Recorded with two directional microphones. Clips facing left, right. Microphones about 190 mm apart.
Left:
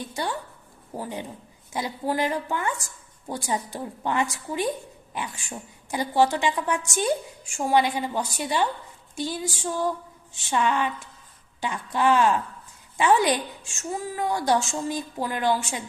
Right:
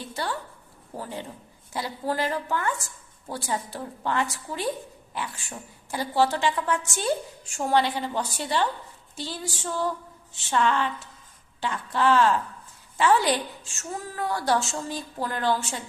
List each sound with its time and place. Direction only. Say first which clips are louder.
0.0 s a woman's voice: left 1 dB; 15° left (ahead or behind)